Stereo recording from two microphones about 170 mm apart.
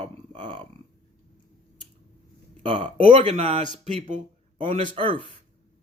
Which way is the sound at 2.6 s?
30° right (ahead or behind).